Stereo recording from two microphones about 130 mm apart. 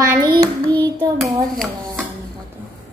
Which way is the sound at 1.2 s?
5° left (ahead or behind).